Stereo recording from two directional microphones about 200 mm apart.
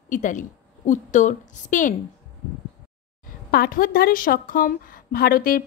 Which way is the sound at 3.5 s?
45° left (ahead or behind).